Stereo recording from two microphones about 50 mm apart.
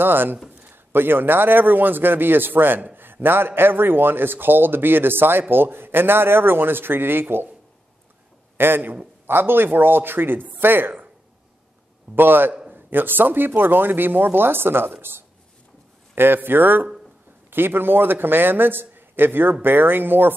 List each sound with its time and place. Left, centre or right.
0.0 s a man's voice: right
8.5 s a man's voice: right
12.2 s a man's voice: right